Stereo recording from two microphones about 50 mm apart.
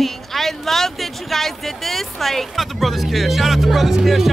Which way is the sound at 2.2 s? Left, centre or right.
Centre.